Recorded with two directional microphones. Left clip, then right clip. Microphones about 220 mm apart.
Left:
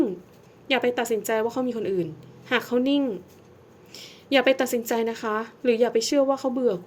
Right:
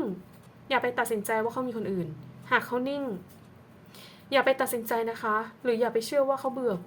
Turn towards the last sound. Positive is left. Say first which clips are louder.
# left 5 dB
turn(degrees=20)  # may be behind; listen again after turning